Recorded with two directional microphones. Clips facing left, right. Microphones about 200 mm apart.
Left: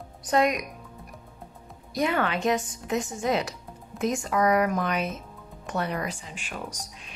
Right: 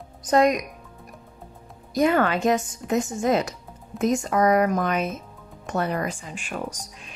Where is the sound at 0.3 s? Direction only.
40° right (ahead or behind).